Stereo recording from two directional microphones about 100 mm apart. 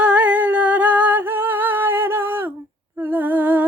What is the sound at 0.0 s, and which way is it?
Humming, 15° right (ahead or behind).